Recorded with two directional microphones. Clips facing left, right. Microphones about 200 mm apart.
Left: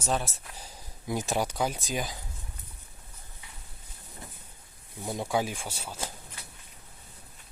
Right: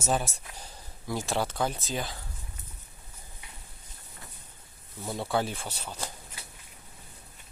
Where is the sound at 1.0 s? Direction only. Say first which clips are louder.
Left 1 dB; 20° left (ahead or behind).